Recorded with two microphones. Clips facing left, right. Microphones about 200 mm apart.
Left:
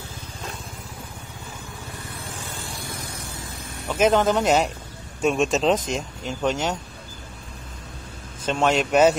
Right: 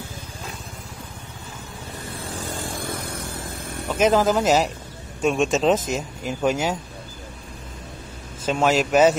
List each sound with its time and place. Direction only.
2.3 s vehicle: 40° right (ahead or behind)
3.9 s speech: centre (ahead or behind)
8.5 s speech: 5° right (ahead or behind)